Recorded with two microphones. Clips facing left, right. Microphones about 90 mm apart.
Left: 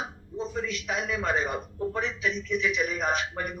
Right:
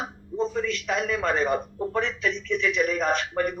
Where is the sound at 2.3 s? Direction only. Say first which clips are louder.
Right 2 dB; 10° left (ahead or behind).